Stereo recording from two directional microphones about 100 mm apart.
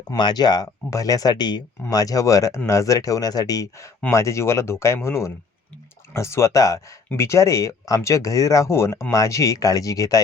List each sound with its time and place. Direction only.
0.2 s speech: 45° left (ahead or behind)